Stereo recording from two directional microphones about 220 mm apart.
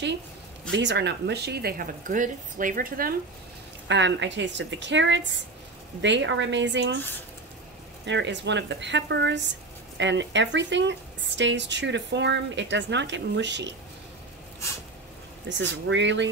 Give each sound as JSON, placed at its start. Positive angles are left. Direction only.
{"t": 0.7, "sound": "speech", "side_deg": -55}
{"t": 3.8, "sound": "speech", "side_deg": -55}
{"t": 8.0, "sound": "speech", "side_deg": -55}
{"t": 15.4, "sound": "speech", "side_deg": -55}